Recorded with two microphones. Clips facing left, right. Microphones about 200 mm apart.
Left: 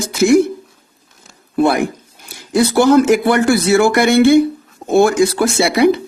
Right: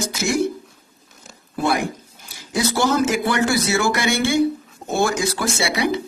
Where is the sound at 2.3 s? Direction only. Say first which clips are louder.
Left 8 dB; 60° left (ahead or behind).